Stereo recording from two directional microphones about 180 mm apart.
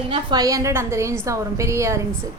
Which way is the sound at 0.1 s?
25° right (ahead or behind).